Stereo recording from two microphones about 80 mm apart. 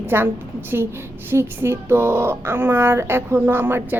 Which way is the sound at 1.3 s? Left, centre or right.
Right.